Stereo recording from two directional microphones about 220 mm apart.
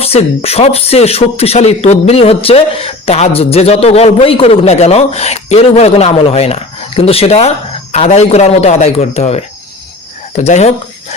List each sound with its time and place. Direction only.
0.0 s speech: 25° left (ahead or behind)